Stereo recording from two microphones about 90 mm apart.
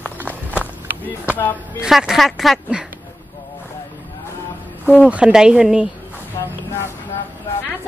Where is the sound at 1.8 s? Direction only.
5° right (ahead or behind).